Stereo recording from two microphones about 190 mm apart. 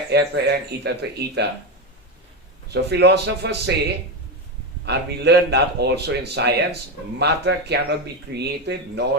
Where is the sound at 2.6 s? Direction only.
60° right (ahead or behind).